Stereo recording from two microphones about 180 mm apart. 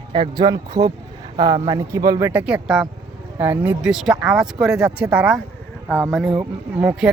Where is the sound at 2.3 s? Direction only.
5° right (ahead or behind).